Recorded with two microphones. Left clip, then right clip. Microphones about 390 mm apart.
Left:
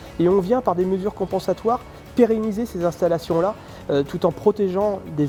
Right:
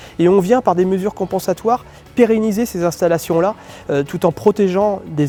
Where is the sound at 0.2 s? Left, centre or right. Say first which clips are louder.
Right 5 dB; right.